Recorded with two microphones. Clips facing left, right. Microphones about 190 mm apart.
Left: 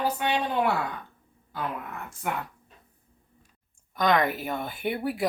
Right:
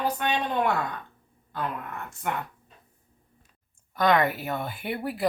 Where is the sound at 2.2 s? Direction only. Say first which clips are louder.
Even; 5° left (ahead or behind).